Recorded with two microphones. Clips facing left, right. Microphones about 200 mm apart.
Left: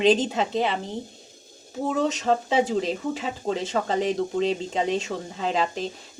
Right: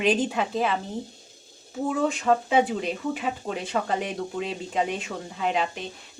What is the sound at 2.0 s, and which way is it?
Speech, 25° left (ahead or behind).